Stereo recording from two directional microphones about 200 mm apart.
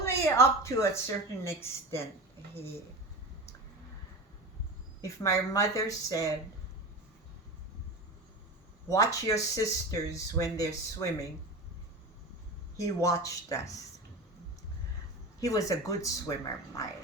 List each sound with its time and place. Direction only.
0.0 s a woman's voice: 15° left (ahead or behind)
5.0 s a woman's voice: 15° left (ahead or behind)
8.9 s a woman's voice: 15° left (ahead or behind)
12.7 s a woman's voice: 15° left (ahead or behind)
15.4 s a woman's voice: 15° left (ahead or behind)